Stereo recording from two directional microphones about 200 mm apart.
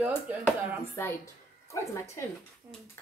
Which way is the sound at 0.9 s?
15° left (ahead or behind).